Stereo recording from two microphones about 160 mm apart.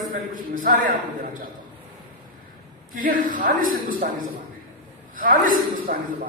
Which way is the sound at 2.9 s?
60° right (ahead or behind).